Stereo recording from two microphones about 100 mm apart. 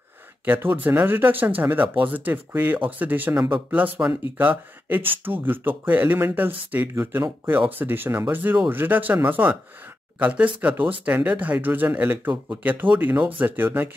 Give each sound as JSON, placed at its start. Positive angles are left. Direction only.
{"t": 0.5, "sound": "speech", "side_deg": -20}
{"t": 3.3, "sound": "speech", "side_deg": -50}
{"t": 3.7, "sound": "speech", "side_deg": -20}